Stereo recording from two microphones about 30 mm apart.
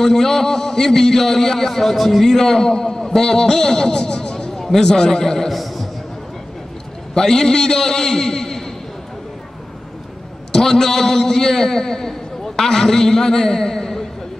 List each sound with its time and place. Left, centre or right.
0.0 s a man's voice: centre
2.2 s a man's voice: centre
5.5 s a sound: centre
7.2 s a man's voice: centre
10.5 s a man's voice: centre